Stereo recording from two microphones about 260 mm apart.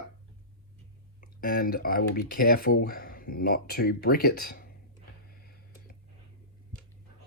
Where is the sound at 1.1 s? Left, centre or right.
Left.